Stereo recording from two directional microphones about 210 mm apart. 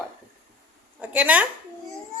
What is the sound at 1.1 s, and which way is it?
Speech, 5° right (ahead or behind).